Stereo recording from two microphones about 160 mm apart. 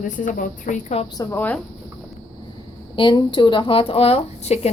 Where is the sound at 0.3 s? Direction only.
55° left (ahead or behind).